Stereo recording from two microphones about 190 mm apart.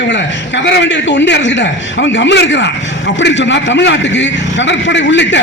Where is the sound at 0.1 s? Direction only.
65° left (ahead or behind).